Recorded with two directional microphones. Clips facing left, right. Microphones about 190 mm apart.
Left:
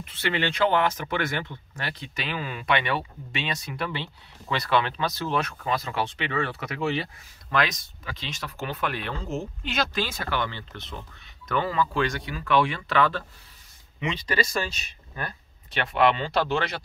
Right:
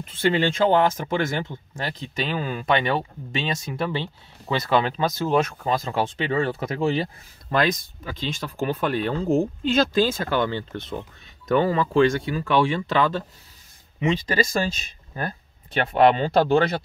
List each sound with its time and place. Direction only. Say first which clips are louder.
0.0 s speech: right 6 dB; 35° right (ahead or behind)
1.4 s speech: right 4 dB; 45° right (ahead or behind)
11.4 s speech: right 5 dB; 30° right (ahead or behind)
15.9 s speech: right 5 dB; 40° right (ahead or behind)